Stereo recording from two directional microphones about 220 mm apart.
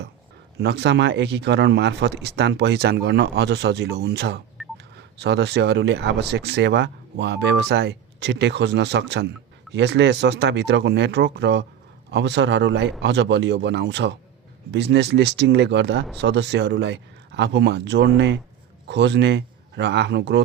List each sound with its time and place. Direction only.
0.6 s speech: 50° right (ahead or behind)
4.6 s telephone dialing: centre (ahead or behind)
4.9 s a man's voice: 50° right (ahead or behind)